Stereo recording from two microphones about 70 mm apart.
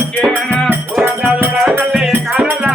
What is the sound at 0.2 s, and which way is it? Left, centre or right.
Music, centre.